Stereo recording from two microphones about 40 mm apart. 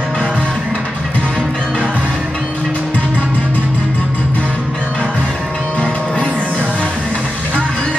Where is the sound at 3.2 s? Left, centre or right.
Left.